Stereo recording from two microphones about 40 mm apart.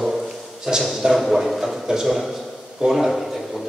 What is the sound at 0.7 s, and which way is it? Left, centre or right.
Speech, centre.